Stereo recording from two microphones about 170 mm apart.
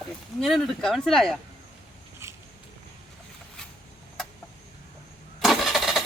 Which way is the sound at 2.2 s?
15° right (ahead or behind).